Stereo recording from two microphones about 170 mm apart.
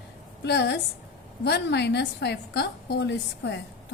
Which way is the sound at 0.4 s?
85° left.